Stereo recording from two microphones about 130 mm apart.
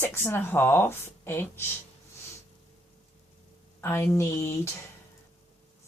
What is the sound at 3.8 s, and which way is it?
Speech, 20° left (ahead or behind).